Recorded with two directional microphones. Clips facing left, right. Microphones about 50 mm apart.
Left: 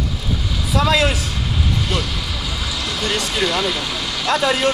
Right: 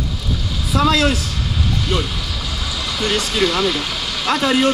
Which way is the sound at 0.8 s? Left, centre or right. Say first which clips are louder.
Right 2 dB; left.